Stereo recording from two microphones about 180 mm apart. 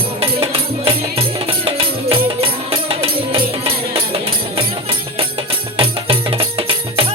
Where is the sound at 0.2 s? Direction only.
30° right (ahead or behind).